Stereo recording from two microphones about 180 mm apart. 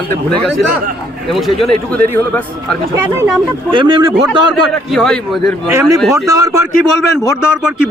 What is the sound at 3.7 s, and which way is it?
Speech, 25° right (ahead or behind).